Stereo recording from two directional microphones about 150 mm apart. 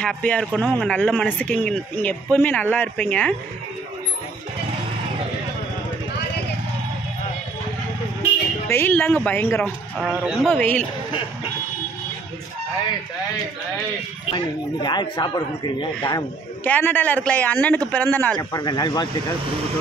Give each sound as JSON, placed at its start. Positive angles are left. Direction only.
{"t": 0.0, "sound": "speech", "side_deg": 5}
{"t": 8.6, "sound": "speech", "side_deg": 15}
{"t": 9.9, "sound": "speech", "side_deg": -5}
{"t": 10.5, "sound": "speech", "side_deg": 10}
{"t": 14.3, "sound": "a man's voice", "side_deg": 30}
{"t": 16.6, "sound": "speech", "side_deg": 10}
{"t": 18.5, "sound": "a man's voice", "side_deg": 25}